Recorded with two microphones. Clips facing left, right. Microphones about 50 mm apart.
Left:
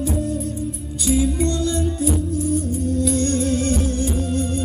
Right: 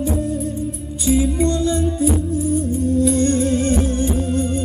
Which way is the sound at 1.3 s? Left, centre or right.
Right.